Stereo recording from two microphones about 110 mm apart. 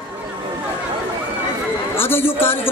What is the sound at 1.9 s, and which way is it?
Speech, 20° left (ahead or behind).